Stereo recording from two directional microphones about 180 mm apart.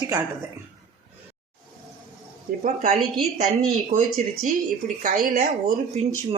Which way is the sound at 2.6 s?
40° right (ahead or behind).